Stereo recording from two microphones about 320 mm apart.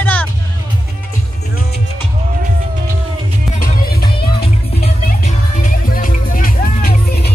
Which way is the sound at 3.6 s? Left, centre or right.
Left.